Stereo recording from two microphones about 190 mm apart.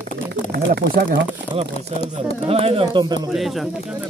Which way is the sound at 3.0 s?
20° right (ahead or behind).